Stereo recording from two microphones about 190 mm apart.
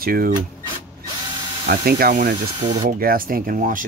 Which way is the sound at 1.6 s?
50° right (ahead or behind).